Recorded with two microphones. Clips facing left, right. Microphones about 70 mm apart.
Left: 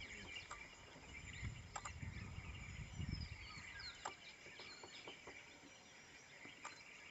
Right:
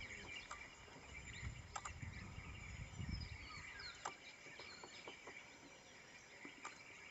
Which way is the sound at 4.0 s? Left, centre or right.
Centre.